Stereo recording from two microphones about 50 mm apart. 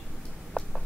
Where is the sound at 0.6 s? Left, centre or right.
Centre.